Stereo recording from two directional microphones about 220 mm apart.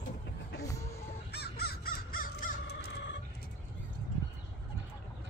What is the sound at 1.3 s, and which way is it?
Crow, 45° left (ahead or behind).